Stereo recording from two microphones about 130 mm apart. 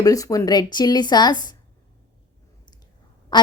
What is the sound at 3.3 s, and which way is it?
Quack, 35° left (ahead or behind).